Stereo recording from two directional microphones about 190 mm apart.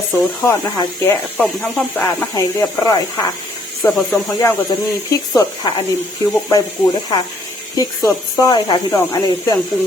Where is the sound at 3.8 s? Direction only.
Centre (ahead or behind).